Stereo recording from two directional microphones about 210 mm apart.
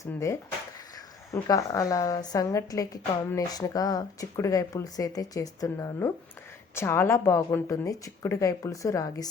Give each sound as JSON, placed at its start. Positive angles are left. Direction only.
{"t": 0.0, "sound": "a woman's voice", "side_deg": 15}